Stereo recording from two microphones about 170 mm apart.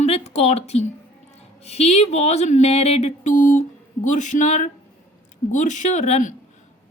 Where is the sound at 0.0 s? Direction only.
40° left (ahead or behind).